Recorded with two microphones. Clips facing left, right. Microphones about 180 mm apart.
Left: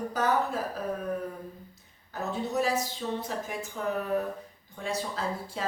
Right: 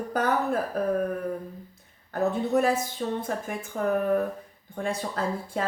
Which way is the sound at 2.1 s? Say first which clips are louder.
Right 7 dB; 55° right (ahead or behind).